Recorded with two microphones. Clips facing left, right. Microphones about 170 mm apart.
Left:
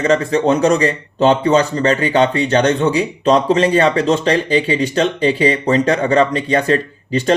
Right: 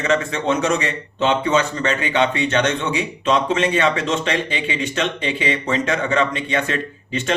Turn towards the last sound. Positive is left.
turn(degrees=35)  # may be behind; listen again after turning